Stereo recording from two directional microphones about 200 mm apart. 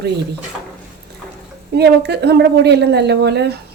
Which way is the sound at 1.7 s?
55° right (ahead or behind).